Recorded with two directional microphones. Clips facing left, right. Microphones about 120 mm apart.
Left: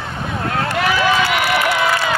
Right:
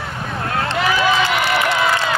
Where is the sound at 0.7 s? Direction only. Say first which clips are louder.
Even; 25° right (ahead or behind).